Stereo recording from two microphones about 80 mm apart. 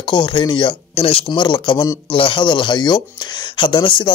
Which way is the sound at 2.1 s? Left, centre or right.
Left.